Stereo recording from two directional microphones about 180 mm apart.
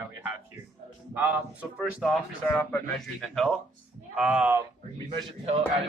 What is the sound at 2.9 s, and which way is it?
Speech, centre (ahead or behind).